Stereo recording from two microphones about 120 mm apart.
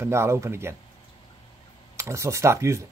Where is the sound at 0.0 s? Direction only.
25° right (ahead or behind).